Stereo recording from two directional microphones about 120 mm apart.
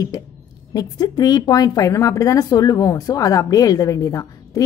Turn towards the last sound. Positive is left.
turn(degrees=30)  # may be behind; listen again after turning